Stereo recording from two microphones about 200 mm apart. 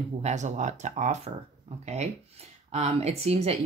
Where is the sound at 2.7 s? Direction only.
35° right (ahead or behind).